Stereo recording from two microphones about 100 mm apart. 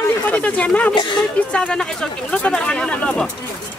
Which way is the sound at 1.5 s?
10° left (ahead or behind).